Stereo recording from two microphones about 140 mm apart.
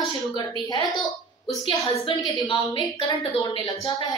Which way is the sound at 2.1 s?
35° left (ahead or behind).